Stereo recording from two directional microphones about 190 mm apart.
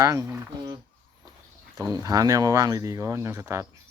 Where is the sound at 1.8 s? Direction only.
20° right (ahead or behind).